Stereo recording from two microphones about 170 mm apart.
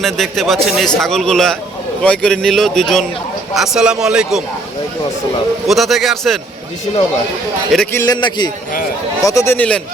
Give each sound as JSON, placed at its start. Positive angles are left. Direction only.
{"t": 0.0, "sound": "a man's voice", "side_deg": 0}
{"t": 5.6, "sound": "a man's voice", "side_deg": 0}
{"t": 7.9, "sound": "a man's voice", "side_deg": 20}